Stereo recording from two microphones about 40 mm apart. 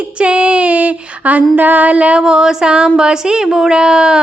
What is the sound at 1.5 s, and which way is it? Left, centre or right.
Mantra, right.